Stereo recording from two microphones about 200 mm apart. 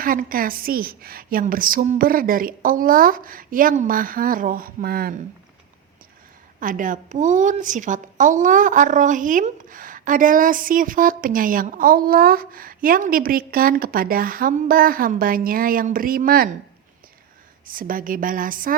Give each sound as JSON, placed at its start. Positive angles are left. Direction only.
{"t": 0.0, "sound": "a woman's voice", "side_deg": -45}
{"t": 6.6, "sound": "a woman's voice", "side_deg": -40}
{"t": 17.7, "sound": "a woman's voice", "side_deg": -45}